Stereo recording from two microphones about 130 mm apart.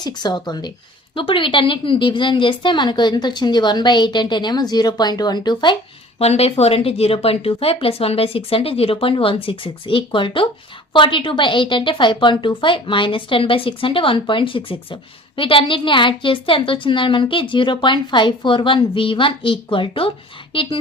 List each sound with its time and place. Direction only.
0.0 s a woman's voice: 35° left (ahead or behind)
6.1 s a woman's voice: 50° left (ahead or behind)